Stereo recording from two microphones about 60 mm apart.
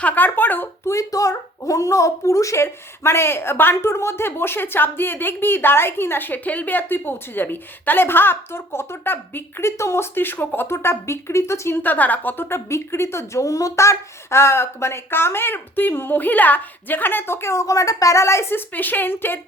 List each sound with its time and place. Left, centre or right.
0.0 s speech: left
0.9 s speech: left
9.6 s speech: left
11.8 s speech: left
12.5 s speech: left
17.5 s speech: left
18.7 s speech: left